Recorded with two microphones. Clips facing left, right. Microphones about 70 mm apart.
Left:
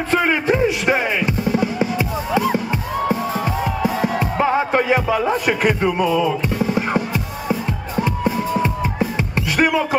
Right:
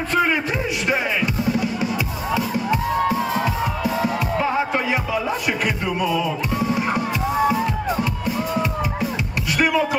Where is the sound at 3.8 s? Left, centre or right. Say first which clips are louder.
Left 3 dB; left.